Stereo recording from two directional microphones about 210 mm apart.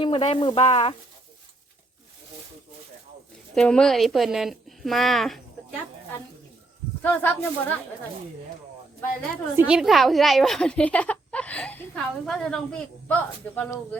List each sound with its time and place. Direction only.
0.0 s frying: 25° left (ahead or behind)
3.5 s a woman's voice: 5° left (ahead or behind)
7.0 s speech: 10° left (ahead or behind)
9.6 s a woman's voice: 5° right (ahead or behind)